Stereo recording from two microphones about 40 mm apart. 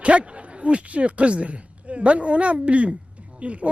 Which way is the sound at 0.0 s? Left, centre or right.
Right.